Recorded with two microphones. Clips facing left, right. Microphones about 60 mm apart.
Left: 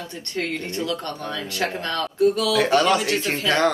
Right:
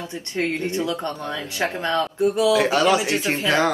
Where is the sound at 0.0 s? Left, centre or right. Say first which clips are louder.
Right 3 dB; centre.